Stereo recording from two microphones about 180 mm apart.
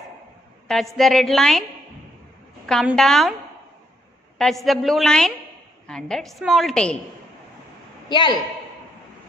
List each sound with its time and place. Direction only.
0.9 s a woman's voice: centre (ahead or behind)
2.6 s a woman's voice: centre (ahead or behind)
4.4 s a woman's voice: centre (ahead or behind)
8.1 s a man's voice: 25° left (ahead or behind)